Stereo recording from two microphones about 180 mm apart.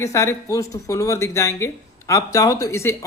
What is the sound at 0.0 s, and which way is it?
Speech, 15° left (ahead or behind).